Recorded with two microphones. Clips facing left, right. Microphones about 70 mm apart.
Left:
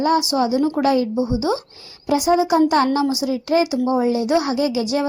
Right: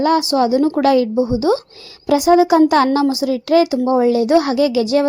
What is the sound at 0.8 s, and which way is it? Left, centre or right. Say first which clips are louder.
Speech: right 5 dB; right.